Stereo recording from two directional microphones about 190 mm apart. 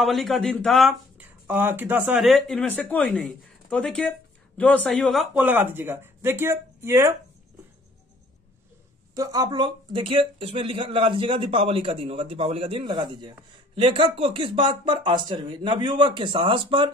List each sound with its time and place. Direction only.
0.0 s speech: centre (ahead or behind)
9.1 s speech: 20° right (ahead or behind)